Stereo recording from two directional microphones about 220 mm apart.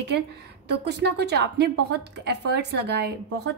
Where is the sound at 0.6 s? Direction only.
50° right (ahead or behind).